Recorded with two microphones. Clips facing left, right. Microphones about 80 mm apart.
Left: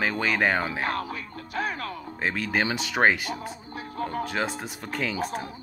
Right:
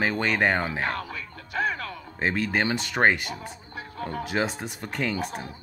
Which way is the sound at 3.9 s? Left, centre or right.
Left.